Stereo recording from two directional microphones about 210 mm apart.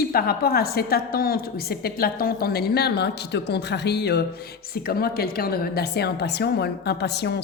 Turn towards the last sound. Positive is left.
turn(degrees=50)  # may be behind; listen again after turning